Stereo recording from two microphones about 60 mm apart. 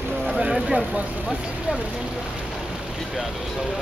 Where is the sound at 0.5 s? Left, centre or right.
Centre.